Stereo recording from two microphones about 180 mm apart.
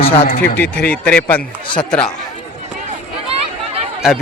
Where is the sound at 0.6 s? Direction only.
10° left (ahead or behind).